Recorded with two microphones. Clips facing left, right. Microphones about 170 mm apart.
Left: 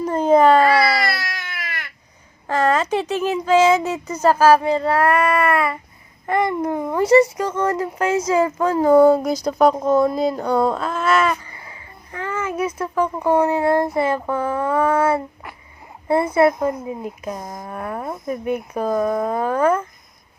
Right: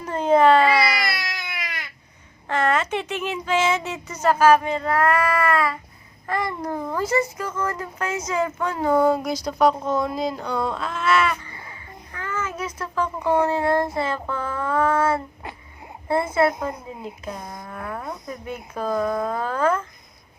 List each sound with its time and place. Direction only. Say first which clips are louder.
0.0 s cat: left 3 dB; 40° left (ahead or behind)
2.5 s speech: left 4 dB; 35° left (ahead or behind); by 7.0 s 20° left (ahead or behind)
7.0 s speech: left 11 dB; 80° left
7.4 s speech: left 7 dB; 30° left (ahead or behind)
12.1 s child singing: left 5 dB; 30° left (ahead or behind)
12.5 s a sound: left 7 dB; 25° left (ahead or behind)
13.2 s speech: left 3 dB; 15° left (ahead or behind)
17.5 s speech: left 4 dB; 30° left (ahead or behind); by 19.8 s 15° left (ahead or behind)